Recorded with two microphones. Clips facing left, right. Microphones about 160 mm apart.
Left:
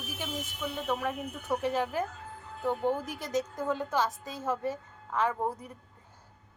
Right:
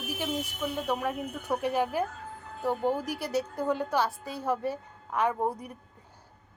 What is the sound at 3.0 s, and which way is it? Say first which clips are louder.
Speech: right 2 dB; 20° left (ahead or behind).